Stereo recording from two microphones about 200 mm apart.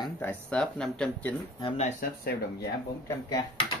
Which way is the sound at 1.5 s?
30° left (ahead or behind).